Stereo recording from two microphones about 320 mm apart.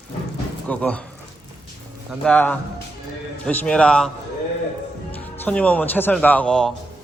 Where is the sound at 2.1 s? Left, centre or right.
Centre.